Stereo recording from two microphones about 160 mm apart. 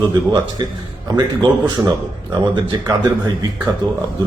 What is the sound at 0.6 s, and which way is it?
Speech, 30° right (ahead or behind).